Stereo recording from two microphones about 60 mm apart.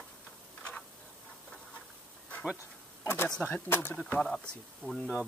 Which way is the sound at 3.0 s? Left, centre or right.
Left.